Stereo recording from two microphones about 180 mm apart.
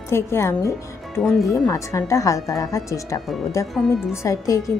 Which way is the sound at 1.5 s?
20° left (ahead or behind).